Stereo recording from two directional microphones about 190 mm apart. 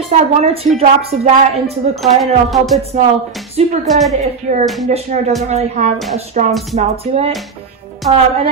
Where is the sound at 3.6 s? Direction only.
35° right (ahead or behind).